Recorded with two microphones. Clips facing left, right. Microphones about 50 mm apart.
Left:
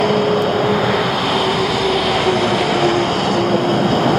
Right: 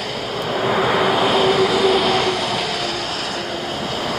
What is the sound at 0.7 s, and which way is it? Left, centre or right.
Vehicle, centre.